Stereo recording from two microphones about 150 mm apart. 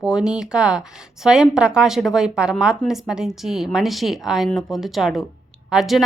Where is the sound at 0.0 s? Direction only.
5° right (ahead or behind).